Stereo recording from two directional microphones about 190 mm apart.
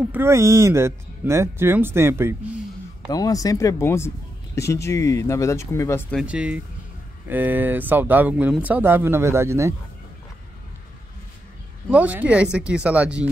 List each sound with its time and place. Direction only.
0.1 s speech: 15° right (ahead or behind)
3.1 s speech: 20° left (ahead or behind)
6.1 s speech: 5° right (ahead or behind)
11.9 s speech: 10° right (ahead or behind)